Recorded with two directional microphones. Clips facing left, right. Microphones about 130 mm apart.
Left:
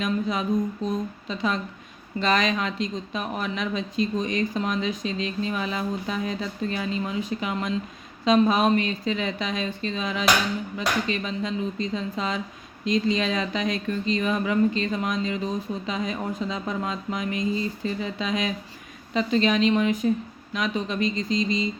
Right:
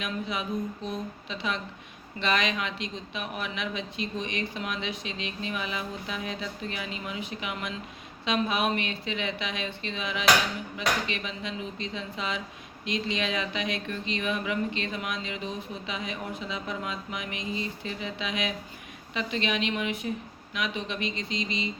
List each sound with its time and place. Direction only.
0.0 s speech: 40° left (ahead or behind)